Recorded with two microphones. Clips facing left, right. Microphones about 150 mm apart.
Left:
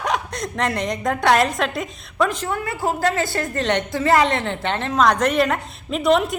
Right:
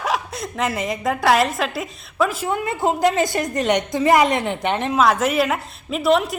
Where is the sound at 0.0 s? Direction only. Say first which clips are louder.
Even; 5° right (ahead or behind).